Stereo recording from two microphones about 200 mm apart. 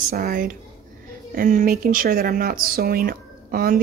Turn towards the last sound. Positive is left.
turn(degrees=-45)  # may be behind; listen again after turning